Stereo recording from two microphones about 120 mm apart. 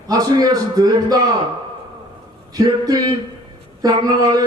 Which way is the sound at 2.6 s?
30° right (ahead or behind).